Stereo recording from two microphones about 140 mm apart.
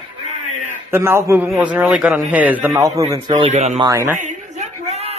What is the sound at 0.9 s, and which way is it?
A man's voice, 15° right (ahead or behind).